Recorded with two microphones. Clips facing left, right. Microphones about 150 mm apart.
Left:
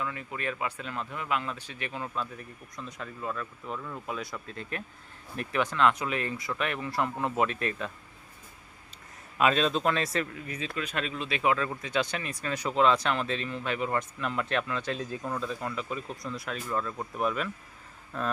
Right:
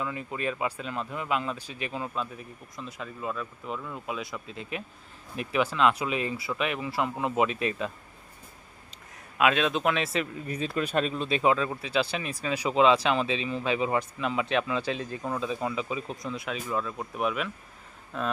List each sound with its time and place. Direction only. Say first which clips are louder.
0.0 s speech: right 3 dB; 20° right (ahead or behind)
1.5 s speech: right 3 dB; 10° right (ahead or behind)
2.7 s speech: right 1 dB; 5° right (ahead or behind)
9.4 s speech: right 1 dB; 5° right (ahead or behind)
10.4 s speech: right 5 dB; 35° right (ahead or behind); by 13.2 s 10° right (ahead or behind)
13.2 s speech: right 3 dB; 90° right
13.5 s speech: right 4 dB; 15° right (ahead or behind)
16.2 s speech: right 2 dB; centre (ahead or behind)